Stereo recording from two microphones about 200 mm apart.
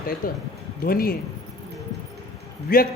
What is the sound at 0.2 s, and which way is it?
Speech, 45° left (ahead or behind).